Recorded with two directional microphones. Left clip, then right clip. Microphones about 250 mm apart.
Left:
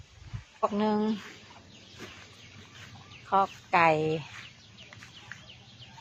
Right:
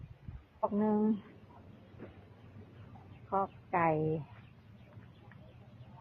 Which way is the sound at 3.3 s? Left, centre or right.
Centre.